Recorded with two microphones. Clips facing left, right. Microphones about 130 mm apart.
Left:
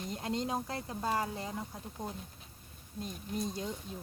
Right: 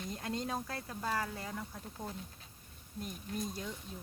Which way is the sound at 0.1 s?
25° left (ahead or behind).